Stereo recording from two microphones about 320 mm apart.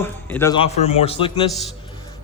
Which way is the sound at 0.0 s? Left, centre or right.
Centre.